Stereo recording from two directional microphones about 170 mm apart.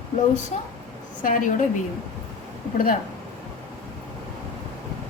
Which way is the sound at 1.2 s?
50° left (ahead or behind).